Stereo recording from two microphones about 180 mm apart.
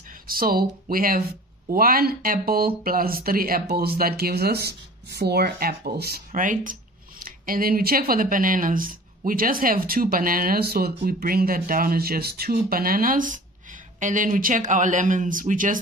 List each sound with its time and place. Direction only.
0.3 s speech: 55° right (ahead or behind)